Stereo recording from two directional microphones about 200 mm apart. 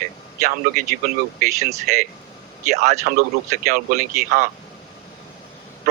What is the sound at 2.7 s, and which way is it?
A man's voice, 35° right (ahead or behind).